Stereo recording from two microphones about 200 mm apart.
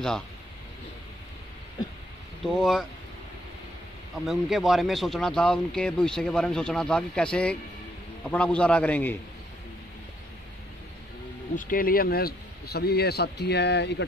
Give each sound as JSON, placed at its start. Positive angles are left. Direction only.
{"t": 2.4, "sound": "speech", "side_deg": 0}
{"t": 4.3, "sound": "a man's voice", "side_deg": 0}
{"t": 11.5, "sound": "speech", "side_deg": 45}